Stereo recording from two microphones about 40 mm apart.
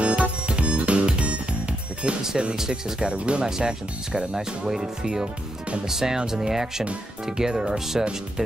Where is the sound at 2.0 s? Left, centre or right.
Right.